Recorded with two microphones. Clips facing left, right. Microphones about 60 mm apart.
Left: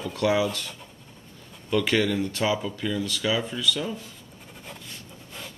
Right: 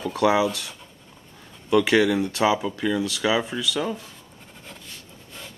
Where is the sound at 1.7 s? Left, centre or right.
Centre.